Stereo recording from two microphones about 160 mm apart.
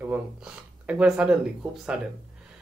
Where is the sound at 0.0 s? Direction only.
10° right (ahead or behind).